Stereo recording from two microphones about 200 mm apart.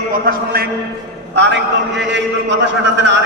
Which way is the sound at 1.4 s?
60° right (ahead or behind).